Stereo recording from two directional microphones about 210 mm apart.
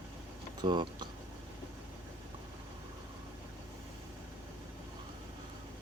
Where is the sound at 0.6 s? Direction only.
20° right (ahead or behind).